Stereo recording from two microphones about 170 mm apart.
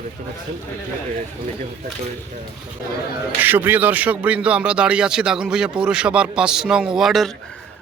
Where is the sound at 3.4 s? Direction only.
10° right (ahead or behind).